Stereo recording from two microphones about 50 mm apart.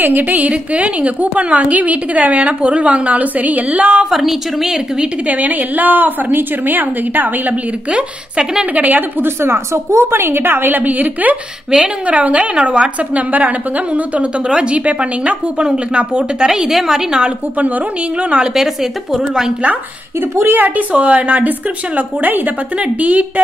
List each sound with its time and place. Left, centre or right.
0.0 s a woman's voice: right
4.0 s a woman's voice: centre
5.0 s a woman's voice: right
7.9 s a woman's voice: centre
8.7 s a woman's voice: right
9.2 s a woman's voice: right; by 17.3 s centre
17.6 s a woman's voice: right
18.5 s speech: centre
20.4 s a woman's voice: right